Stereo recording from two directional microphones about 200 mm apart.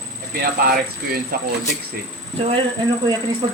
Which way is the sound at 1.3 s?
45° right (ahead or behind).